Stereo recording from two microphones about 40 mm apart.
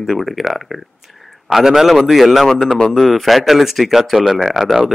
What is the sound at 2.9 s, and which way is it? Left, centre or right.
A man's voice, centre.